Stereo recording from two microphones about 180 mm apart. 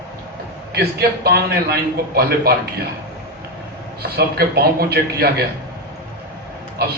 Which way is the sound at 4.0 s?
60° right (ahead or behind).